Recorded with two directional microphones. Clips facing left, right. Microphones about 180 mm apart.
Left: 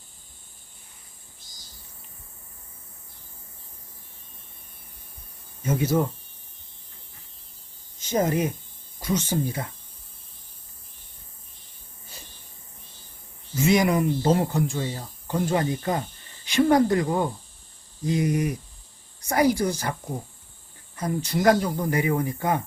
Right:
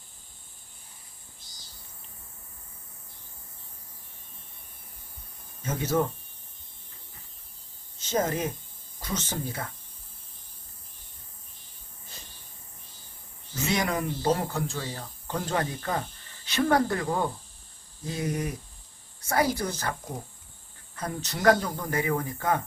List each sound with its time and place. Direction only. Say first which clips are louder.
5.6 s speech: left 5 dB; 10° left (ahead or behind)
7.9 s speech: left 4 dB; 15° left (ahead or behind)
13.6 s speech: left 7 dB; 10° left (ahead or behind)
20.9 s speech: left 7 dB; 10° left (ahead or behind)